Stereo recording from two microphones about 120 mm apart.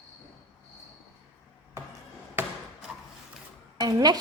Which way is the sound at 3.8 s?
35° right (ahead or behind).